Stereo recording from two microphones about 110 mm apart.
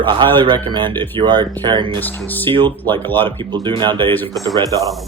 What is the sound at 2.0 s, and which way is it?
Speech, 15° left (ahead or behind).